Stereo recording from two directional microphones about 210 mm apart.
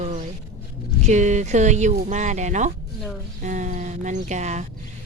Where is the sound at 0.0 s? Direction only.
35° right (ahead or behind).